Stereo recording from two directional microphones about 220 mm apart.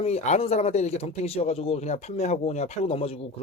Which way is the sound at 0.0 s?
30° left (ahead or behind).